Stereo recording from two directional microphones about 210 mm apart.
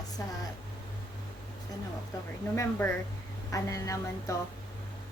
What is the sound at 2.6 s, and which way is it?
A woman's voice, 10° left (ahead or behind).